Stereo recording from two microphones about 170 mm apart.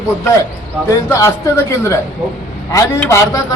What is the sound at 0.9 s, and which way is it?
Speech, 15° left (ahead or behind).